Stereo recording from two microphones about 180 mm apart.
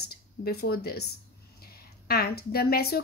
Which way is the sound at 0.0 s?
60° left (ahead or behind).